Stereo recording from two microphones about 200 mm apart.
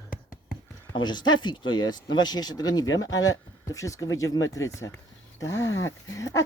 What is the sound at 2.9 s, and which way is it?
Speech, 75° left (ahead or behind).